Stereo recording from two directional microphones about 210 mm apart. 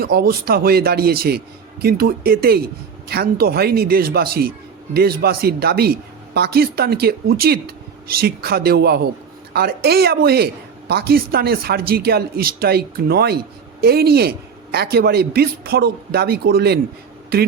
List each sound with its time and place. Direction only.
0.0 s a woman's voice: 45° right (ahead or behind)